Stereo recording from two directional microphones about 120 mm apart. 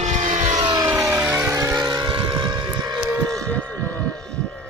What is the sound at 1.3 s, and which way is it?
Vehicle, 25° right (ahead or behind).